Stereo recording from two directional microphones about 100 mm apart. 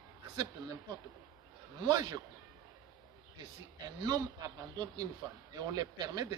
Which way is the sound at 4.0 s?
40° right (ahead or behind).